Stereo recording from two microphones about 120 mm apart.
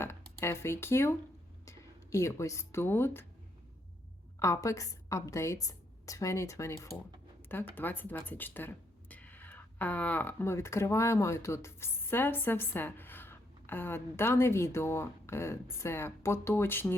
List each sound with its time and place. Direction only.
0.0 s speech: 20° left (ahead or behind)
4.4 s a woman's voice: 25° left (ahead or behind)
7.4 s a sound: 15° left (ahead or behind)
7.8 s speech: 15° left (ahead or behind)